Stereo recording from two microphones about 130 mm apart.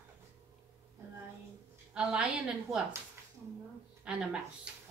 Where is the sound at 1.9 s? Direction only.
5° right (ahead or behind).